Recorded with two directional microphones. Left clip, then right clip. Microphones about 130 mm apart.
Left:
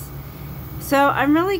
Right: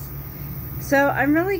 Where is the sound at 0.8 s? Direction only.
25° left (ahead or behind).